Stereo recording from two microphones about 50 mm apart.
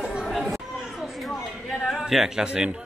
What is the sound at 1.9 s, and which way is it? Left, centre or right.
Speech, centre.